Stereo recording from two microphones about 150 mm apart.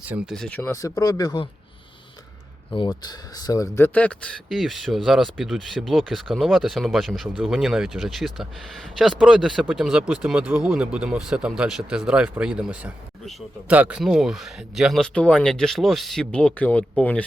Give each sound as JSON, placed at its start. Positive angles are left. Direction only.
{"t": 0.0, "sound": "speech", "side_deg": -10}
{"t": 0.3, "sound": "speech", "side_deg": 5}
{"t": 0.6, "sound": "speech", "side_deg": 20}
{"t": 2.7, "sound": "speech", "side_deg": 30}